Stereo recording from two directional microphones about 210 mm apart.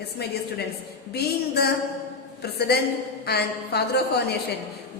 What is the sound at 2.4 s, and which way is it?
A woman's voice, 50° left (ahead or behind).